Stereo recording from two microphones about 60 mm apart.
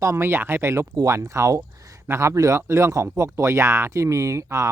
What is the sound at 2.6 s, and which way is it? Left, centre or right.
Speech, right.